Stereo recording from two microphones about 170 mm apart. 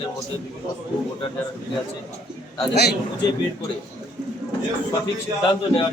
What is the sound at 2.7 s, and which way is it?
Speech, 70° left (ahead or behind).